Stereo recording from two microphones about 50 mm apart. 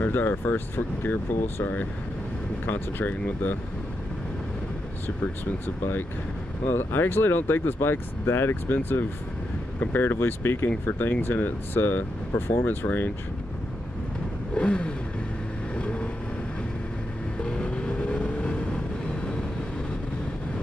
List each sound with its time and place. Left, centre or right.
0.0 s speech: left
5.0 s speech: left
8.6 s speech: left
10.0 s speech: left
10.9 s speech: left
14.5 s vehicle: left
17.4 s vehicle: centre